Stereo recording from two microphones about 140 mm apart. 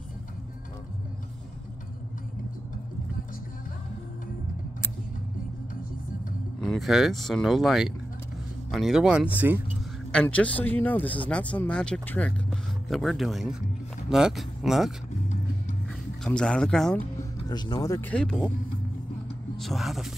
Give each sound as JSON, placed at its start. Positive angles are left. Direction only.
{"t": 6.6, "sound": "speech", "side_deg": 0}
{"t": 10.1, "sound": "speech", "side_deg": 10}
{"t": 16.3, "sound": "speech", "side_deg": 5}
{"t": 17.5, "sound": "speech", "side_deg": 30}
{"t": 18.0, "sound": "speech", "side_deg": 5}
{"t": 19.5, "sound": "speech", "side_deg": 0}